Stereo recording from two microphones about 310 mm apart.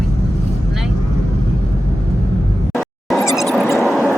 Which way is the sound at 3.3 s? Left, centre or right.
Centre.